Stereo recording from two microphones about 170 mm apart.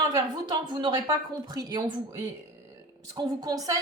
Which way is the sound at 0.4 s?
30° right (ahead or behind).